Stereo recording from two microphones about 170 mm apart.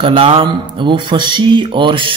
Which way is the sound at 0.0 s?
30° right (ahead or behind).